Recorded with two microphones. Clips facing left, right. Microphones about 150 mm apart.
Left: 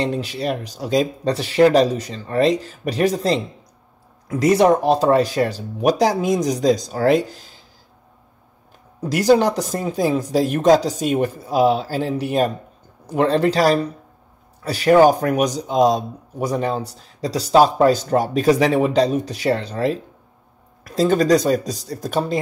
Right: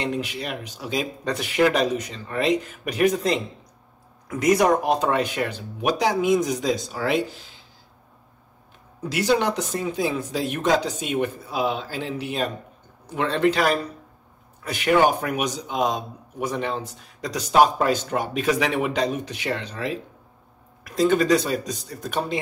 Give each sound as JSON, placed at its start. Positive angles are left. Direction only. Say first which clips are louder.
{"t": 0.0, "sound": "speech", "louder": "left 5 dB", "side_deg": 35}
{"t": 9.0, "sound": "speech", "louder": "left 6 dB", "side_deg": 40}